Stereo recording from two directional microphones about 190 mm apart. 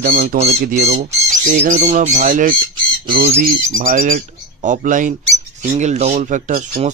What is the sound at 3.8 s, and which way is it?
Speech, 40° right (ahead or behind).